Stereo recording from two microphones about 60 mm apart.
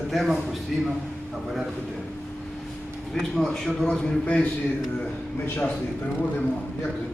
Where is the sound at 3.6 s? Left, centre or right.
Centre.